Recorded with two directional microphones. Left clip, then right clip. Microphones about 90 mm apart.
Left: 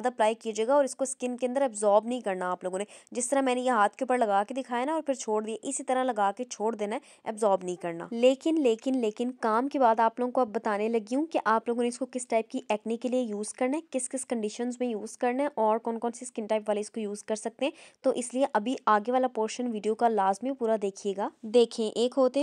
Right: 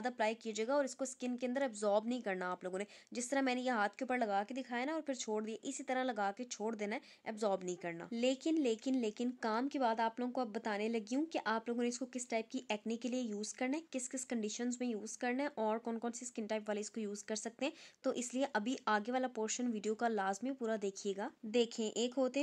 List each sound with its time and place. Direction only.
0.0 s speech: 40° left (ahead or behind)
1.8 s a woman's voice: 30° left (ahead or behind)
8.1 s speech: 55° left (ahead or behind)
15.5 s speech: 40° left (ahead or behind); by 22.4 s 60° left (ahead or behind)